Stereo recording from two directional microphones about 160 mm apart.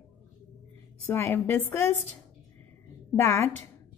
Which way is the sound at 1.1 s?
15° left (ahead or behind).